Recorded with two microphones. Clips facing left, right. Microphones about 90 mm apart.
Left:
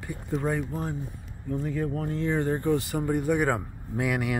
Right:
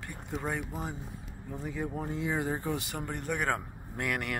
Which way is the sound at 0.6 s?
5° right (ahead or behind).